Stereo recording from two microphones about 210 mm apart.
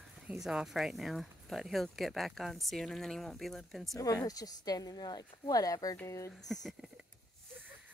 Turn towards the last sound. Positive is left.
turn(degrees=0)  # may be behind; listen again after turning